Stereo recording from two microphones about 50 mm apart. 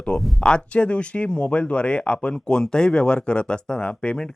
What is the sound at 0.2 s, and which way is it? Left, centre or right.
Speech, centre.